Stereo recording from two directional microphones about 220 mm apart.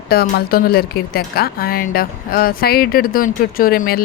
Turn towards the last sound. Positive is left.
turn(degrees=40)  # may be behind; listen again after turning